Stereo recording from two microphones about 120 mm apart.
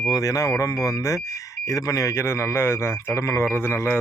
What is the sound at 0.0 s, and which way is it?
Speech, 30° left (ahead or behind).